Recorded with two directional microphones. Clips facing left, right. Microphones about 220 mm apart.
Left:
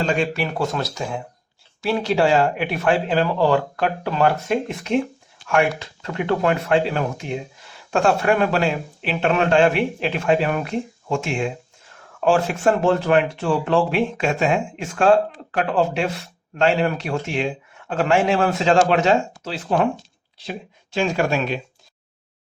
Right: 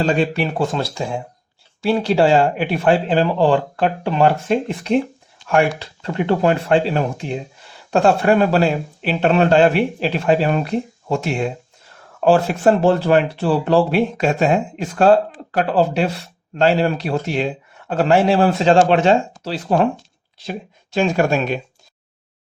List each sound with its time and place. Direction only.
0.0 s speech: 35° right (ahead or behind)